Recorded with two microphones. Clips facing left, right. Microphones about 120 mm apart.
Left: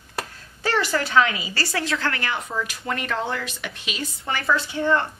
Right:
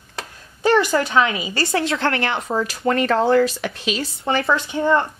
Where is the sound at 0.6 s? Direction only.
20° right (ahead or behind).